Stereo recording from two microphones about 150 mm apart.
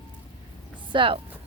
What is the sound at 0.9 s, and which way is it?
Speech, 35° right (ahead or behind).